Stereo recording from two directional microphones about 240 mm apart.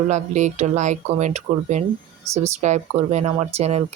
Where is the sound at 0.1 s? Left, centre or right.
Right.